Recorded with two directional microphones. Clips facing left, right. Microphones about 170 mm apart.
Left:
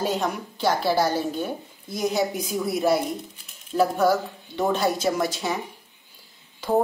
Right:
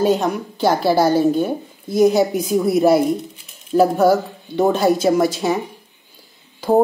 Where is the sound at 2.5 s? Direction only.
30° right (ahead or behind).